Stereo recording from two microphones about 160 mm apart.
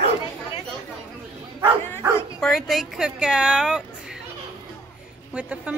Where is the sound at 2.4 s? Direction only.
Centre (ahead or behind).